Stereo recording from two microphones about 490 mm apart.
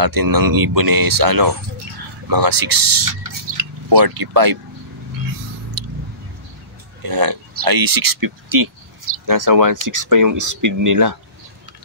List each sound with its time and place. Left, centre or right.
0.0 s speech: right
5.8 s a sound: right
7.0 s speech: right